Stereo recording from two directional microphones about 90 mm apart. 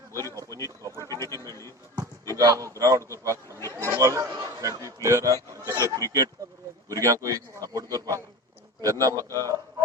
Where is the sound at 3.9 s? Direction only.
35° right (ahead or behind).